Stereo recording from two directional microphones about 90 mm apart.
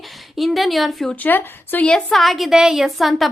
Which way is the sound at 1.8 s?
5° left (ahead or behind).